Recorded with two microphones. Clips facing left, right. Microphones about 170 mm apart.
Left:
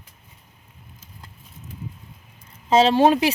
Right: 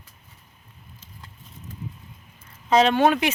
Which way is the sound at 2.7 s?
30° left (ahead or behind).